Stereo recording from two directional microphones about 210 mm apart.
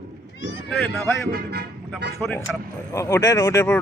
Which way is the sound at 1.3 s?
50° right (ahead or behind).